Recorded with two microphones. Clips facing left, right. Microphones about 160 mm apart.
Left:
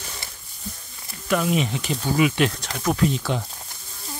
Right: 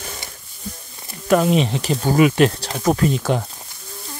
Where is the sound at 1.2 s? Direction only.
45° right (ahead or behind).